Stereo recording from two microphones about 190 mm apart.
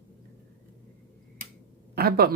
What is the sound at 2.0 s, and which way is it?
Speech, 55° right (ahead or behind).